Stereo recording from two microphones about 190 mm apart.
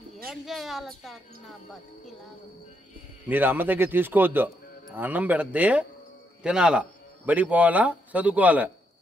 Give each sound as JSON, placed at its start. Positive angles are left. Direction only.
{"t": 0.3, "sound": "speech", "side_deg": 0}
{"t": 3.3, "sound": "a man's voice", "side_deg": -10}